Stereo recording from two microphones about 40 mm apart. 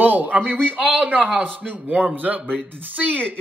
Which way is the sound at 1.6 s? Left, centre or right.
Right.